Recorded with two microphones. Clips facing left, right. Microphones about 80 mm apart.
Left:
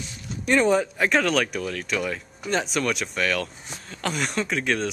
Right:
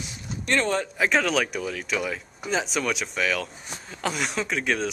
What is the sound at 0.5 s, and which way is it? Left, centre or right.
Speech, centre.